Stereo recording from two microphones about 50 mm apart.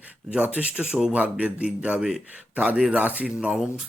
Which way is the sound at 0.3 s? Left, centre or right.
Right.